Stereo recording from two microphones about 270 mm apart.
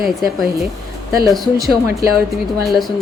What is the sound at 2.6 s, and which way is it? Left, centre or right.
Speech, centre.